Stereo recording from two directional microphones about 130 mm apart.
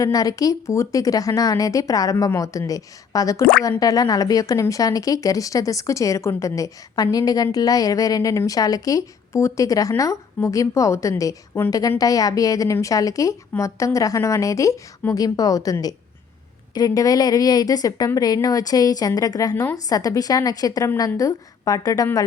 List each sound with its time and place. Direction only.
0.0 s speech: 30° left (ahead or behind)